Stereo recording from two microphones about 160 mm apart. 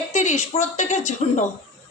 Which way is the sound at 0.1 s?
45° left (ahead or behind).